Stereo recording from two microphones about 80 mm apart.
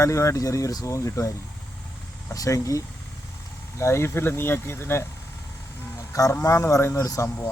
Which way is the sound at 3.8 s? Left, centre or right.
Left.